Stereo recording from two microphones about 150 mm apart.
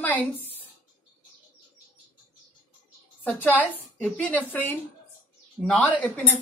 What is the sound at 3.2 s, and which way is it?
A woman's voice, 10° left (ahead or behind).